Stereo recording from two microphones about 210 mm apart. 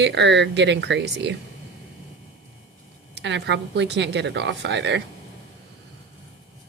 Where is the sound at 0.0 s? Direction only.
55° right (ahead or behind).